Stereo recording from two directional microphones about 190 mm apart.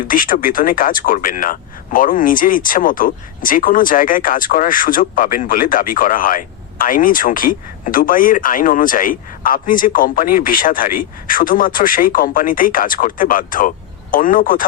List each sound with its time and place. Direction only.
0.1 s speech: 45° left (ahead or behind)